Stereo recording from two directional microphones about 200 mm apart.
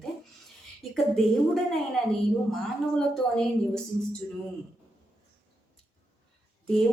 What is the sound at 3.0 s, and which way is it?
A woman's voice, 5° left (ahead or behind).